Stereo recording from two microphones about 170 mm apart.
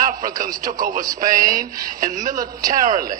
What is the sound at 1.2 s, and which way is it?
Speech, 50° right (ahead or behind).